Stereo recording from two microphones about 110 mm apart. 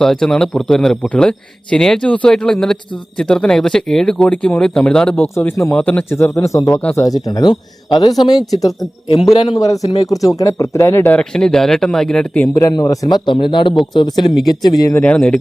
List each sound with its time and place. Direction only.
0.0 s a man's voice: 5° left (ahead or behind)
5.4 s speech: 20° left (ahead or behind)
5.7 s a man's voice: 10° left (ahead or behind)
12.6 s a man's voice: 30° left (ahead or behind)
14.9 s speech: 10° left (ahead or behind)